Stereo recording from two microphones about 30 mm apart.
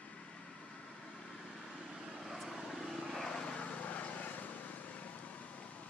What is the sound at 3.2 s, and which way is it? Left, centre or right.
Vehicle, left.